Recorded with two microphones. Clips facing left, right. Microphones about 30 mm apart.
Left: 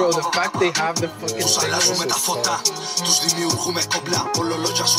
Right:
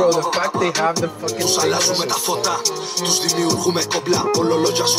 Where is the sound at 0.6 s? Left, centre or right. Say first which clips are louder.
Right 2 dB; centre.